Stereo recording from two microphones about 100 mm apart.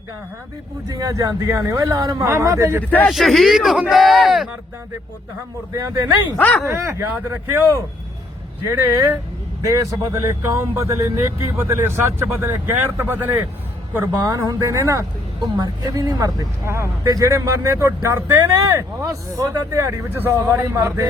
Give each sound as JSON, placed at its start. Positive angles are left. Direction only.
{"t": 0.9, "sound": "speech", "side_deg": -35}
{"t": 2.8, "sound": "speech", "side_deg": 15}
{"t": 3.1, "sound": "speech", "side_deg": 0}
{"t": 5.7, "sound": "speech", "side_deg": -35}
{"t": 6.3, "sound": "speech", "side_deg": 20}
{"t": 6.7, "sound": "a man's voice", "side_deg": -25}
{"t": 14.3, "sound": "speech", "side_deg": -35}
{"t": 15.4, "sound": "speech", "side_deg": -45}
{"t": 20.1, "sound": "a man's voice", "side_deg": -20}